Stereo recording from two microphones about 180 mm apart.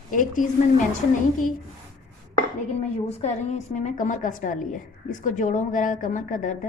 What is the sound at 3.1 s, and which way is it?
A woman's voice, 35° left (ahead or behind).